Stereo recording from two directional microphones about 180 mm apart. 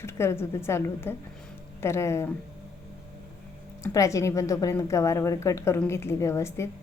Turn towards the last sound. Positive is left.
turn(degrees=15)  # may be behind; listen again after turning